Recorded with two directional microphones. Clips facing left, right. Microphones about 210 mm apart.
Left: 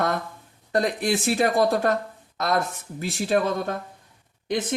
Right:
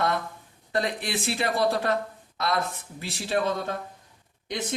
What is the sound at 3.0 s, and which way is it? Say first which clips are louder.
Speech: left 4 dB; 50° left (ahead or behind).